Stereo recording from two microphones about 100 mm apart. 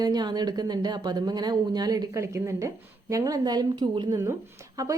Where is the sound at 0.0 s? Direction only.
45° right (ahead or behind).